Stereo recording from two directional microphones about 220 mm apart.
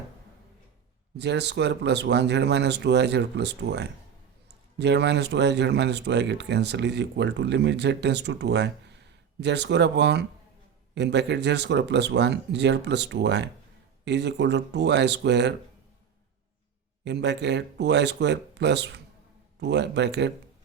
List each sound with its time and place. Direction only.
1.1 s speech: 50° right (ahead or behind)
17.0 s speech: 50° right (ahead or behind)